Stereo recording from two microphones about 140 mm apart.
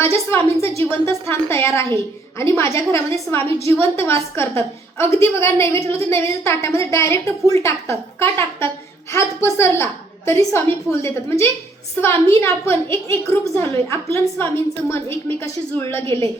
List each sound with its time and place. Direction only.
0.0 s a woman's voice: 20° left (ahead or behind)